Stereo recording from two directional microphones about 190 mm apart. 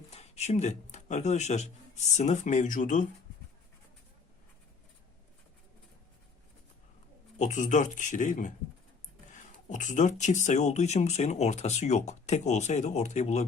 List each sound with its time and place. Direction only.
0.1 s speech: 35° left (ahead or behind)
7.3 s speech: 40° left (ahead or behind)
9.6 s speech: 40° left (ahead or behind)